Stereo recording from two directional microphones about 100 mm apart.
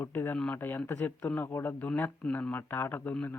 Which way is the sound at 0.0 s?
25° left (ahead or behind).